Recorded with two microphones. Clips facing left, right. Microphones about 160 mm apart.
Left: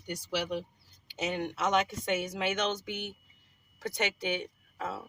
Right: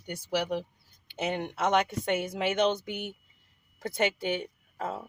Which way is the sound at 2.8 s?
45° right (ahead or behind).